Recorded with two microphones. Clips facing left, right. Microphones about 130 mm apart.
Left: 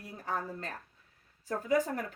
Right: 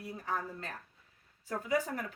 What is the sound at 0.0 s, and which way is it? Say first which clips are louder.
A woman's voice: left 1 dB; 40° left (ahead or behind).